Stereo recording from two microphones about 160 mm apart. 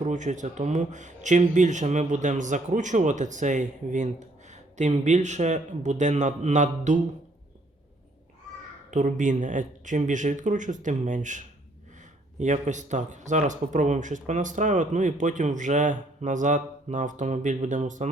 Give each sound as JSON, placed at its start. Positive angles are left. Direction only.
{"t": 0.0, "sound": "speech", "side_deg": -50}
{"t": 8.9, "sound": "speech", "side_deg": -50}